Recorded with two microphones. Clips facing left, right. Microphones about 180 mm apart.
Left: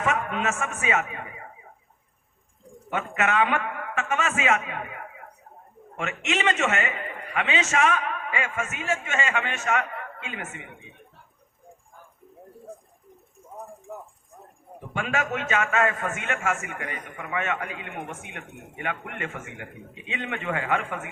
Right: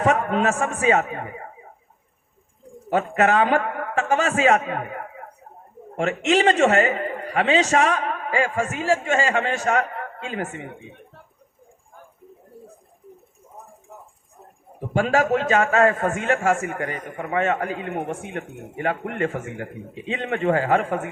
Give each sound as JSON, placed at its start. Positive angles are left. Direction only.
{"t": 0.0, "sound": "a man's voice", "side_deg": -35}
{"t": 2.9, "sound": "a man's voice", "side_deg": -35}
{"t": 14.8, "sound": "a man's voice", "side_deg": -35}